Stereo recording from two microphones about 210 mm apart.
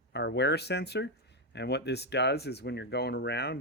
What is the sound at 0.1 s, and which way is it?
Speech, 55° left (ahead or behind).